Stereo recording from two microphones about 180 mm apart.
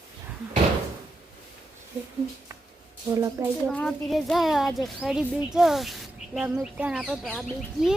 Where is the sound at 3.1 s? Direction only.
15° right (ahead or behind).